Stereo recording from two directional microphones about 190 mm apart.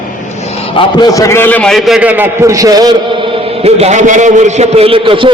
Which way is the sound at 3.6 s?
35° right (ahead or behind).